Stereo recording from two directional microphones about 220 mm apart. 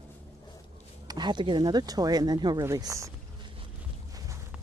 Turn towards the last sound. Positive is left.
turn(degrees=-15)  # may be behind; listen again after turning